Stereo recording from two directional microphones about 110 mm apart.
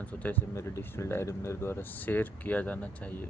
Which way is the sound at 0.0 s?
15° left (ahead or behind).